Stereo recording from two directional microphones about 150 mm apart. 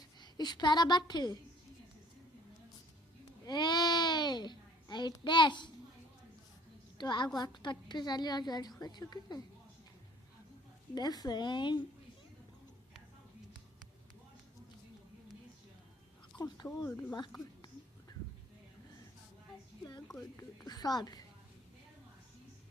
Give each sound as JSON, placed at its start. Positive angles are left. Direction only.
{"t": 0.2, "sound": "a woman's voice", "side_deg": 30}
{"t": 3.4, "sound": "a sound", "side_deg": 30}
{"t": 7.0, "sound": "a woman's voice", "side_deg": 30}
{"t": 10.9, "sound": "a woman's voice", "side_deg": 25}
{"t": 16.4, "sound": "a woman's voice", "side_deg": 25}
{"t": 20.3, "sound": "a woman's voice", "side_deg": 25}